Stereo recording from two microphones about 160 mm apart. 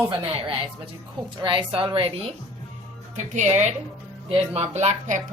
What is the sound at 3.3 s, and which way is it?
Speech, 45° right (ahead or behind).